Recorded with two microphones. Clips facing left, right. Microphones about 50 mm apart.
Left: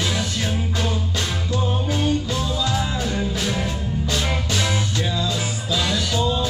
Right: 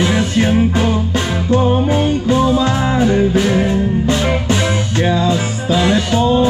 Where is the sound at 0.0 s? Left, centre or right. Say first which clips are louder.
Right 10 dB; right.